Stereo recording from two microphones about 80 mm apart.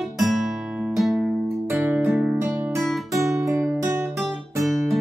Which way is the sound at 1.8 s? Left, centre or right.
Right.